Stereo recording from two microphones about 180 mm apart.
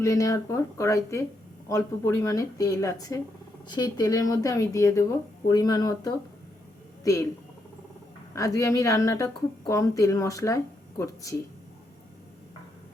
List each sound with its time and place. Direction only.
0.0 s a woman's voice: 20° left (ahead or behind)
8.4 s a woman's voice: 15° left (ahead or behind)